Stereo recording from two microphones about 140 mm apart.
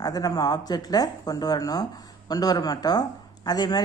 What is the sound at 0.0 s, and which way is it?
Speech, 25° left (ahead or behind).